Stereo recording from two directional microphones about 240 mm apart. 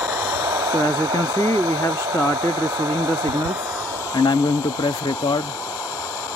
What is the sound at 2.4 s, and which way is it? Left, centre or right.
Speech, centre.